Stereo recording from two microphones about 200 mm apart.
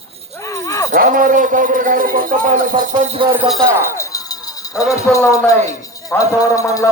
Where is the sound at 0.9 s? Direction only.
40° right (ahead or behind).